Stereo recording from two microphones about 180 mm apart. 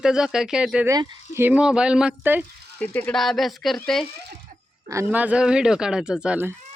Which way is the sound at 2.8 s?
10° left (ahead or behind).